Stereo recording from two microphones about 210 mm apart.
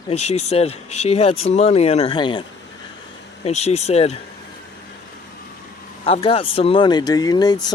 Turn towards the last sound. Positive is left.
turn(degrees=20)  # may be behind; listen again after turning